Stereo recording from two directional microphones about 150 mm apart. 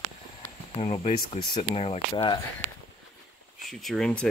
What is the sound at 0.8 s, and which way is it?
Speech, 40° left (ahead or behind).